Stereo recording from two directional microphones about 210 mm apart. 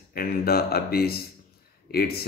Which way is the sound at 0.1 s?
45° left (ahead or behind).